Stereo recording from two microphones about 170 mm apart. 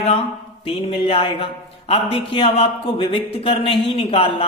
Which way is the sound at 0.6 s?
35° left (ahead or behind).